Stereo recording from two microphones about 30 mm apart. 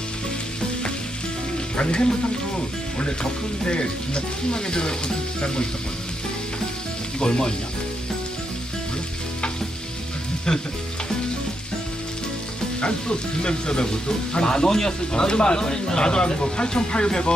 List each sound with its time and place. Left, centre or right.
1.7 s speech: left
3.7 s speech: left
7.2 s speech: left
12.8 s speech: left